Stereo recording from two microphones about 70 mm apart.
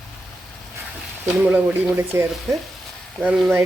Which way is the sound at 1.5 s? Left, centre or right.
Right.